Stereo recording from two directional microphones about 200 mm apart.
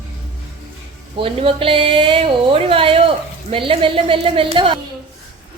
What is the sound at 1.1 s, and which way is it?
A woman's voice, 25° right (ahead or behind).